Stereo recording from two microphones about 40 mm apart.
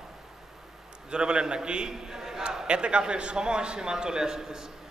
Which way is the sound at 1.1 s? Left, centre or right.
Right.